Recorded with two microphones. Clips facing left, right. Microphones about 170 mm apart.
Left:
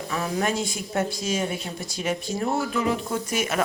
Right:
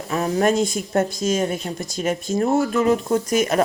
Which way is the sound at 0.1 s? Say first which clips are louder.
Right 7 dB; 40° right (ahead or behind).